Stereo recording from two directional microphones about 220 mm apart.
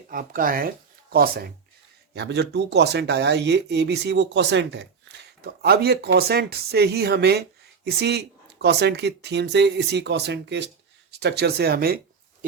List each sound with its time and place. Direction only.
0.1 s speech: 40° right (ahead or behind)